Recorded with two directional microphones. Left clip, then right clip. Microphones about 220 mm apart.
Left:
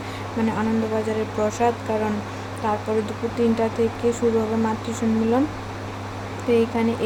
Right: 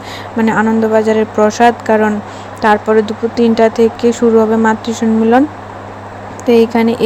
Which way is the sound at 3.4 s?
25° right (ahead or behind).